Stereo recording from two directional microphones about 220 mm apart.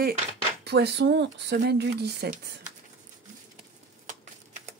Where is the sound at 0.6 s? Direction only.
50° right (ahead or behind).